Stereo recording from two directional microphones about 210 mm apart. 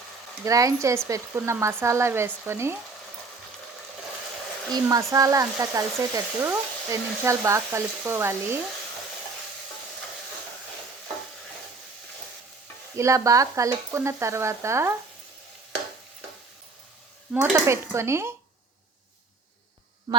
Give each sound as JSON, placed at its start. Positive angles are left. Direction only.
{"t": 0.4, "sound": "speech", "side_deg": -15}
{"t": 4.7, "sound": "speech", "side_deg": -15}
{"t": 13.0, "sound": "speech", "side_deg": -15}
{"t": 17.3, "sound": "speech", "side_deg": -10}
{"t": 20.1, "sound": "a sound", "side_deg": -20}